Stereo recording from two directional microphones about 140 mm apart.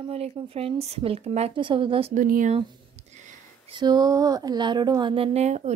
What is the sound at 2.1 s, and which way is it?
Speech, 70° right (ahead or behind).